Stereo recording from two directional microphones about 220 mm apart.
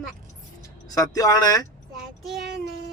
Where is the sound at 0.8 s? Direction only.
15° left (ahead or behind).